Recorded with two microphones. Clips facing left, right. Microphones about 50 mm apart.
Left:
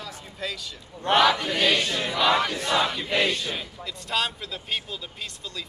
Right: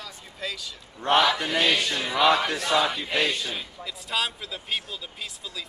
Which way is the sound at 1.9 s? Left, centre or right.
Centre.